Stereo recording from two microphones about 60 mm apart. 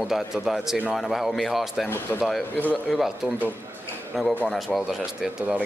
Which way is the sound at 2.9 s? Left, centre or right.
Centre.